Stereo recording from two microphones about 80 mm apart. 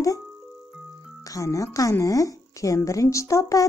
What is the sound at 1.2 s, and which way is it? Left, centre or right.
Speech, left.